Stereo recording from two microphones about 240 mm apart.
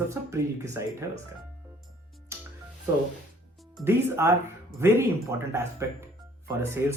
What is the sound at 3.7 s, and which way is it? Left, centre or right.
Speech, centre.